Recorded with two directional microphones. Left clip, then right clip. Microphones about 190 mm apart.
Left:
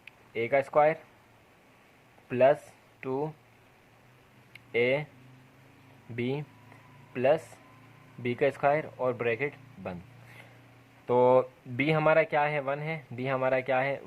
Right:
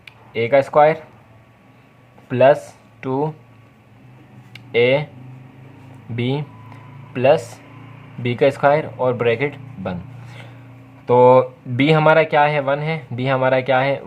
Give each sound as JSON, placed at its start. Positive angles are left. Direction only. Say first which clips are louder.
{"t": 0.0, "sound": "speech", "louder": "right 11 dB", "side_deg": 25}
{"t": 2.3, "sound": "speech", "louder": "right 10 dB", "side_deg": 25}
{"t": 4.5, "sound": "a sound", "louder": "right 11 dB", "side_deg": 20}
{"t": 6.1, "sound": "speech", "louder": "right 9 dB", "side_deg": 20}